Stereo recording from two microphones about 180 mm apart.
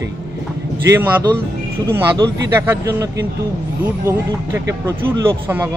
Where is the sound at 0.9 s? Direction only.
10° right (ahead or behind).